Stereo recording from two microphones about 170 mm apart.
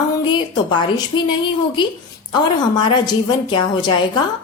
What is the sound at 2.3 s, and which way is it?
A woman's voice, 25° left (ahead or behind).